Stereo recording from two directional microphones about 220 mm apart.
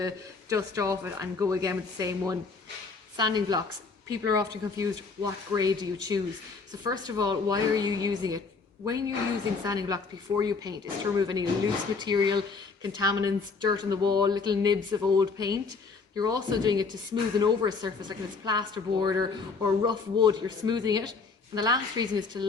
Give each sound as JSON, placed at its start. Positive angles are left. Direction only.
{"t": 0.5, "sound": "speech", "side_deg": -15}